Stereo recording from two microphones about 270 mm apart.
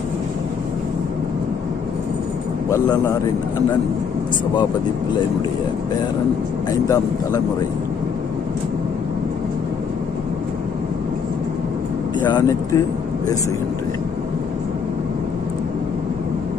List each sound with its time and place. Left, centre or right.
2.6 s speech: centre
6.7 s speech: centre
12.2 s speech: centre